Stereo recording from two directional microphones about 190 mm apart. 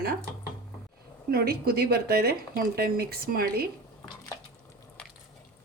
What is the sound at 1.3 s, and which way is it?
Speech, 55° right (ahead or behind).